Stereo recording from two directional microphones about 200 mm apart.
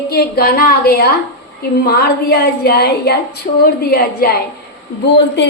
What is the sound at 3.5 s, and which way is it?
Speech, 40° left (ahead or behind).